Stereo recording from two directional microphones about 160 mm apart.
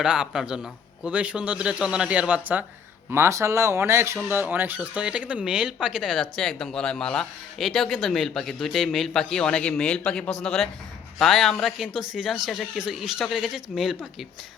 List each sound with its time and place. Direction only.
0.0 s a man's voice: 5° right (ahead or behind)